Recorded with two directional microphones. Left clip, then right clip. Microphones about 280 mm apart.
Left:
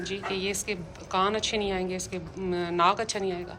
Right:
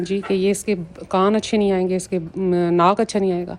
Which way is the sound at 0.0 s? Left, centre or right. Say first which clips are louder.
Right 10 dB; centre.